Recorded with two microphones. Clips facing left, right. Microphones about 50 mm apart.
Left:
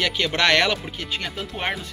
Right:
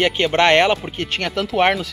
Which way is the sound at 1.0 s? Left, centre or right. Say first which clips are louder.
Right 7 dB; right.